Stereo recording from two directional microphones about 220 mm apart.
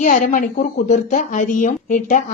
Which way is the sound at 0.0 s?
35° left (ahead or behind).